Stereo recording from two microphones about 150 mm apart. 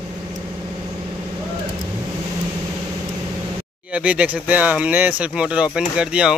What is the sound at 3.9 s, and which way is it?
Speech, 10° right (ahead or behind).